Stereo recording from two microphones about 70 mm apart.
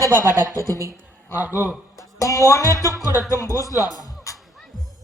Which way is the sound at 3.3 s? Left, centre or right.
Left.